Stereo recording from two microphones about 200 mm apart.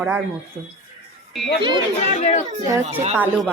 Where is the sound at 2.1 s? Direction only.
35° left (ahead or behind).